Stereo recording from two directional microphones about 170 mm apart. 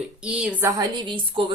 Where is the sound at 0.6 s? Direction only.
25° right (ahead or behind).